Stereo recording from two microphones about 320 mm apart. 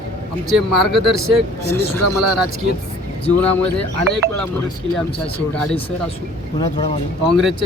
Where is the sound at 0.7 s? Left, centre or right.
Centre.